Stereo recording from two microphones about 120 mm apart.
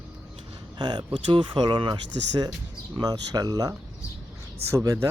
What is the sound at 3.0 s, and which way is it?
Speech, 30° right (ahead or behind).